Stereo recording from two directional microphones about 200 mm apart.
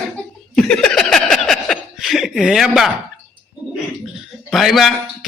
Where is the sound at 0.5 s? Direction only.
5° left (ahead or behind).